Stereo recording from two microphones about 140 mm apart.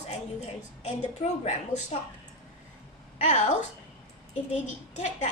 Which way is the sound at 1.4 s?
55° left (ahead or behind).